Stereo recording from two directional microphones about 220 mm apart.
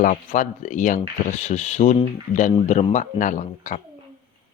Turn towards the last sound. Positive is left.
turn(degrees=35)  # may be behind; listen again after turning